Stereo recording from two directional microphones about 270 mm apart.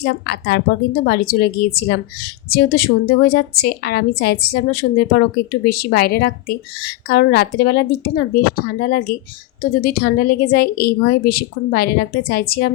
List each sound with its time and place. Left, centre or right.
0.0 s a woman's voice: left